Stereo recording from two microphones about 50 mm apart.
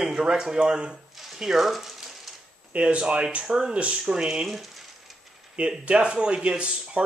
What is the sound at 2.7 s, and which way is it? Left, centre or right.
Speech, right.